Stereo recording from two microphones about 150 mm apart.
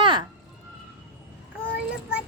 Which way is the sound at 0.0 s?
30° right (ahead or behind).